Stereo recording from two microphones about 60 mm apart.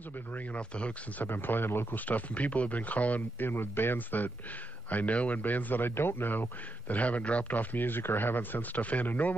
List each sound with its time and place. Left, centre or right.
0.5 s speech: centre
1.3 s speech: left
2.0 s speech: left